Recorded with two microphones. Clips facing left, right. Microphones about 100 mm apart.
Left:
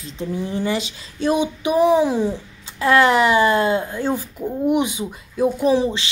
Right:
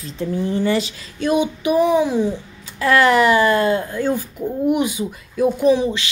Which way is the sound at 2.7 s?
20° left (ahead or behind).